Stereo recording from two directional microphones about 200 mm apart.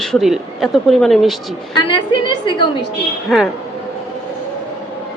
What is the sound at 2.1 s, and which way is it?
Speech, 20° left (ahead or behind).